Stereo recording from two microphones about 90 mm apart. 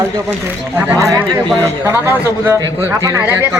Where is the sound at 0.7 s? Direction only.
20° right (ahead or behind).